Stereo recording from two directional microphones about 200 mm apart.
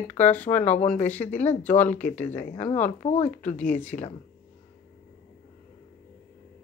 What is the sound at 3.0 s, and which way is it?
Speech, 35° left (ahead or behind).